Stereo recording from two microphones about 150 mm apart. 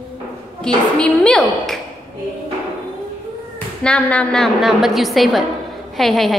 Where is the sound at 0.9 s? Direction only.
5° left (ahead or behind).